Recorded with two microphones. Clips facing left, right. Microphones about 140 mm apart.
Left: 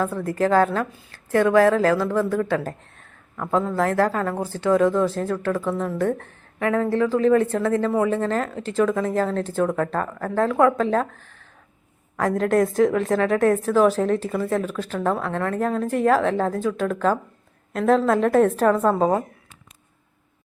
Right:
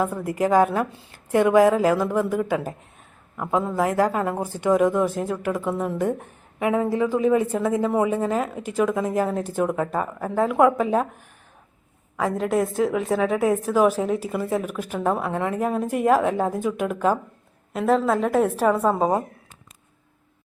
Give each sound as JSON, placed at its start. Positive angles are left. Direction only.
{"t": 0.0, "sound": "a woman's voice", "side_deg": -15}